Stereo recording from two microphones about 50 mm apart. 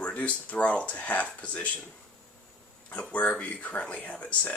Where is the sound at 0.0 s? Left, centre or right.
Left.